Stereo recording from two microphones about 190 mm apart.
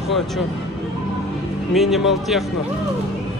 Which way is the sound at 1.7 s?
Centre (ahead or behind).